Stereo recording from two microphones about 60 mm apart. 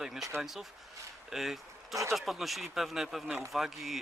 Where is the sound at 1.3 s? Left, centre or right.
Centre.